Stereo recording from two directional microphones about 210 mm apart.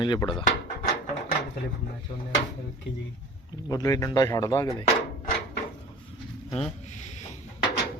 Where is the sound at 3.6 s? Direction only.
15° left (ahead or behind).